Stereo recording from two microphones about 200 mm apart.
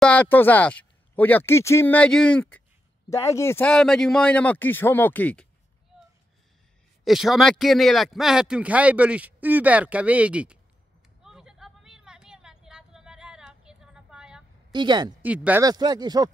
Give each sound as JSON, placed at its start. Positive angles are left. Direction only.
{"t": 0.0, "sound": "speech", "side_deg": 5}
{"t": 7.1, "sound": "speech", "side_deg": 0}
{"t": 11.2, "sound": "vehicle", "side_deg": 0}
{"t": 14.7, "sound": "speech", "side_deg": -20}
{"t": 15.2, "sound": "speech", "side_deg": -5}
{"t": 15.6, "sound": "speech", "side_deg": -20}